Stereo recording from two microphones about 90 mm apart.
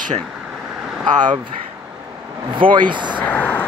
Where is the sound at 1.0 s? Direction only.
55° right (ahead or behind).